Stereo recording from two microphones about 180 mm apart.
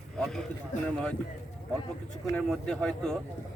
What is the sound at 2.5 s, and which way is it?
Speech, 5° left (ahead or behind).